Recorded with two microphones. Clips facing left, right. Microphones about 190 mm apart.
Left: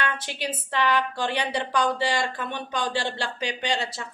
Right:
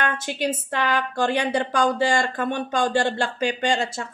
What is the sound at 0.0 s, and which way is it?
A woman's voice, 50° right (ahead or behind).